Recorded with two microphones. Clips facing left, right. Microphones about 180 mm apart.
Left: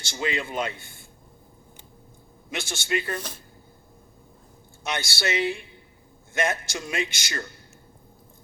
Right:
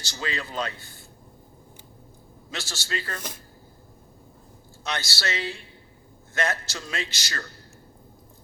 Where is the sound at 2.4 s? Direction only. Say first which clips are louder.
Left 5 dB; 20° left (ahead or behind).